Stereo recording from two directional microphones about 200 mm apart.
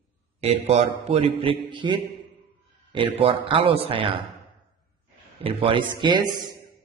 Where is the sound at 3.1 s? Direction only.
25° right (ahead or behind).